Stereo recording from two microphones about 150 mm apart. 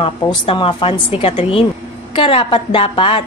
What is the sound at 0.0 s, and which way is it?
A woman's voice, 35° left (ahead or behind).